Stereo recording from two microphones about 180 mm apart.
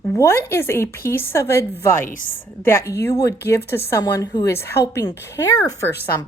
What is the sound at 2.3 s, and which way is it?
A woman's voice, 10° left (ahead or behind).